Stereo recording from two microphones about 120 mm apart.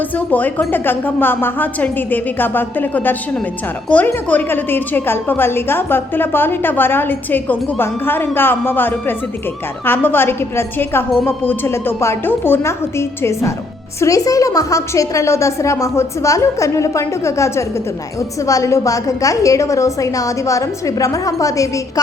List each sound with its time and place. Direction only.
0.2 s a woman's voice: 15° left (ahead or behind)